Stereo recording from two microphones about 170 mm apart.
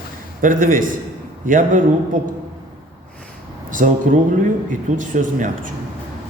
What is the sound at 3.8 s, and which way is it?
Speech, 50° right (ahead or behind).